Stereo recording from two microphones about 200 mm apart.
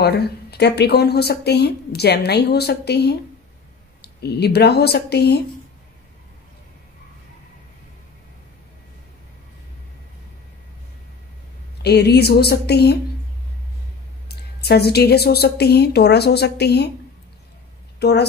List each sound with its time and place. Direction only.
0.0 s speech: 55° left (ahead or behind)
11.8 s speech: 55° left (ahead or behind)
14.3 s speech: 55° left (ahead or behind)
17.9 s a woman's voice: 55° left (ahead or behind)